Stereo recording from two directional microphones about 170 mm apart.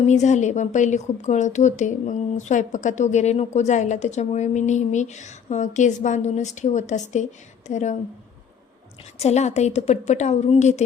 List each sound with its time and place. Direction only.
0.0 s speech: 45° left (ahead or behind)
9.1 s a woman's voice: 40° left (ahead or behind)